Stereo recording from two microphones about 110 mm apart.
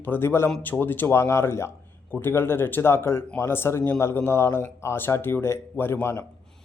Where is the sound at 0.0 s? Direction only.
20° left (ahead or behind).